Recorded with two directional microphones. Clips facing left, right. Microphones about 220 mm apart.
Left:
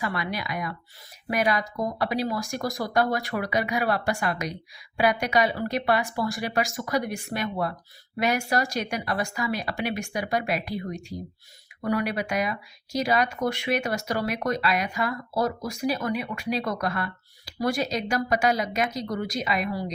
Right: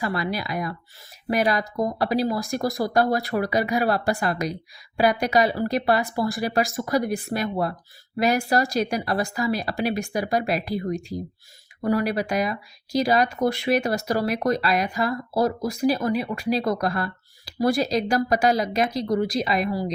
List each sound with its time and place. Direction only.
0.0 s speech: 35° right (ahead or behind)